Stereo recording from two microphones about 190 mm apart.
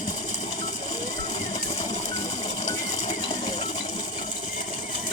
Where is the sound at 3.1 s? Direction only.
20° left (ahead or behind).